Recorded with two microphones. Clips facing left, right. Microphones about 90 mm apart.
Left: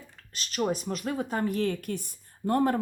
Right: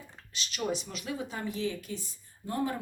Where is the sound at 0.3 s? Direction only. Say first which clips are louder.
Left 4 dB; 45° left (ahead or behind).